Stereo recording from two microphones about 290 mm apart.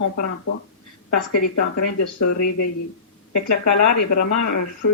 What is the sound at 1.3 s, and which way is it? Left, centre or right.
Speech, left.